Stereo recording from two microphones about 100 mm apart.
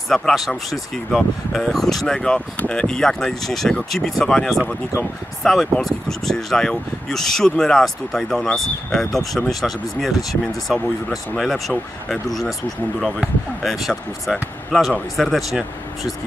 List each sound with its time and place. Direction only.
0.1 s speech: 5° left (ahead or behind)
13.6 s speech: centre (ahead or behind)